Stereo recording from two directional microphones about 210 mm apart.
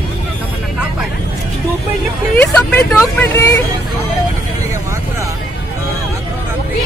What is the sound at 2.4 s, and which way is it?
Speech, 10° left (ahead or behind).